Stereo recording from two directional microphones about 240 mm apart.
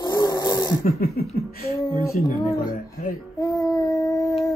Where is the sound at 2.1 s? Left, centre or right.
Left.